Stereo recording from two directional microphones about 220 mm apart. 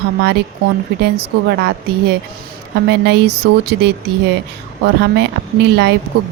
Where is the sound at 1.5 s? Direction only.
45° right (ahead or behind).